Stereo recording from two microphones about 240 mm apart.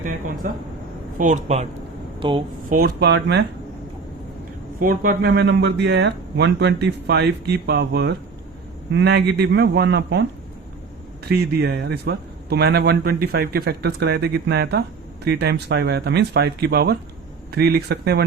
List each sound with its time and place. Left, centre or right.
1.2 s speech: right
2.6 s a man's voice: right
4.8 s a man's voice: right
11.3 s a man's voice: right